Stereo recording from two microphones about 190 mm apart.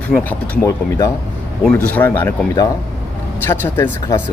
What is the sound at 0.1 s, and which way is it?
Speech, 10° left (ahead or behind).